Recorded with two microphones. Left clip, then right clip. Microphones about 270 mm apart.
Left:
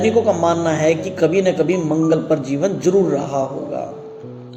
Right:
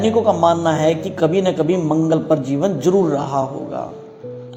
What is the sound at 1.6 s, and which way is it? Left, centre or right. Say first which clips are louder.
Speech: right 1 dB; right.